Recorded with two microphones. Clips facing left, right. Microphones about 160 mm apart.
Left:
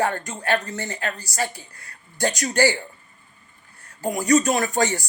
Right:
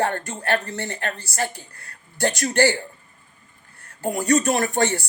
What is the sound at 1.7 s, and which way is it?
Speech, 55° right (ahead or behind).